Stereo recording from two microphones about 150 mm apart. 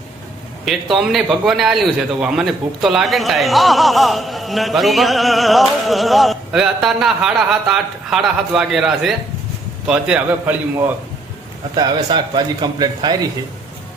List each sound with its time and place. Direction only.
0.6 s a man's voice: centre (ahead or behind)
11.7 s speech: 25° right (ahead or behind)